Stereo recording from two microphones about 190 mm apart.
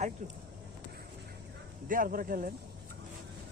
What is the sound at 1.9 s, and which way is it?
Speech, 45° right (ahead or behind).